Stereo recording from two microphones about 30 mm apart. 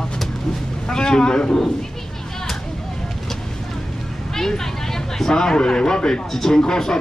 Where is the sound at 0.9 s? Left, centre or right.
Left.